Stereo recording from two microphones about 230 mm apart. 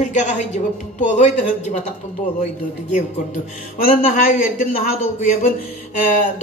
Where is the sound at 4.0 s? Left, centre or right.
Left.